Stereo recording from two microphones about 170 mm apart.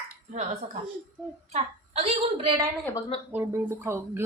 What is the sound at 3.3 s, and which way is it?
Speech, 10° right (ahead or behind).